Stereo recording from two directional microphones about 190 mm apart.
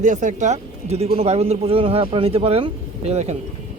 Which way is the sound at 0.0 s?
40° right (ahead or behind).